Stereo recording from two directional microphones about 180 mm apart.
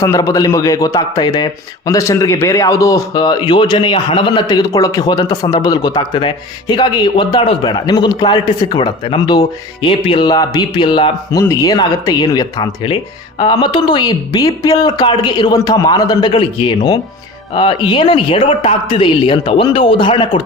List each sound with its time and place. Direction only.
0.0 s speech: 20° left (ahead or behind)